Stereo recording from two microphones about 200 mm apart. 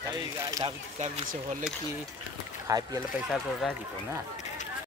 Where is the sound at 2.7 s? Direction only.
15° right (ahead or behind).